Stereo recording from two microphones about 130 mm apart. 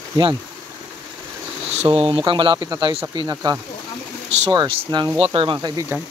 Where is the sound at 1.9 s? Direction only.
45° right (ahead or behind).